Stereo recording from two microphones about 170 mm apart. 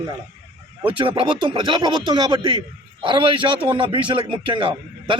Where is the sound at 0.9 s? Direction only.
30° right (ahead or behind).